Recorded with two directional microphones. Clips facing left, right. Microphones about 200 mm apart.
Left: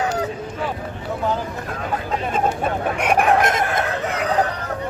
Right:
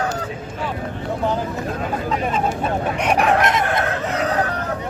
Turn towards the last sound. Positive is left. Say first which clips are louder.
# even
turn(degrees=50)  # may be behind; listen again after turning